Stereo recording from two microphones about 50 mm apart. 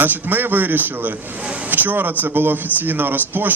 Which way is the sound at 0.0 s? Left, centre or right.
Right.